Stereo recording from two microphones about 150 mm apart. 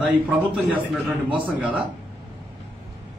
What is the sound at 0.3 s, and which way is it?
Speech, 10° right (ahead or behind).